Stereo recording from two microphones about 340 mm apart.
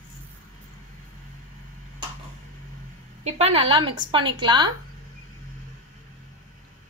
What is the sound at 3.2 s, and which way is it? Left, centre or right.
A woman's voice, centre.